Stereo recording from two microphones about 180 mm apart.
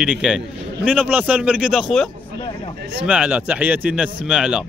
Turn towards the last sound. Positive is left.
turn(degrees=-5)  # may be behind; listen again after turning